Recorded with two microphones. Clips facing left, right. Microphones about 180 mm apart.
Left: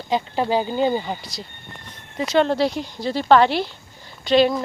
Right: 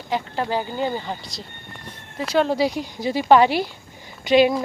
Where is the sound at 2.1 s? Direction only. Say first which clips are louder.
Left 1 dB; 5° right (ahead or behind).